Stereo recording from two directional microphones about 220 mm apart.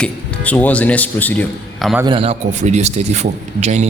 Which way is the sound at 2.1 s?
25° right (ahead or behind).